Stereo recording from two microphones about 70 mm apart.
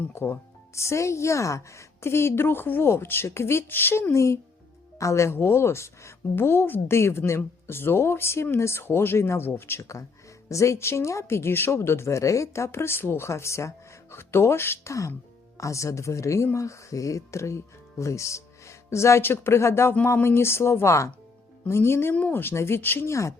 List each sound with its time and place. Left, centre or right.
0.1 s a woman's voice: left
9.8 s a woman's voice: left
15.5 s a woman's voice: left
22.1 s a woman's voice: left